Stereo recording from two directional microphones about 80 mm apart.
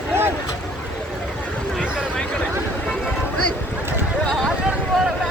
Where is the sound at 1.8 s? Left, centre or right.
Centre.